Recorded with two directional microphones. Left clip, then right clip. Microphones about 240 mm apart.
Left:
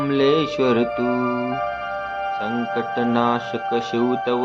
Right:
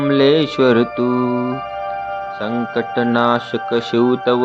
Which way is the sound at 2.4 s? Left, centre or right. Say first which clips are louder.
Right 3 dB; centre.